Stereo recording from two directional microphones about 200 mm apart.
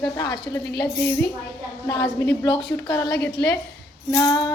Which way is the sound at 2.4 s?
25° left (ahead or behind).